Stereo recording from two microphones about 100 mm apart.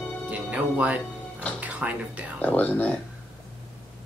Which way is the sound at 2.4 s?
15° left (ahead or behind).